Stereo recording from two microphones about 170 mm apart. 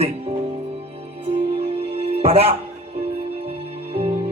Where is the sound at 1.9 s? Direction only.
35° right (ahead or behind).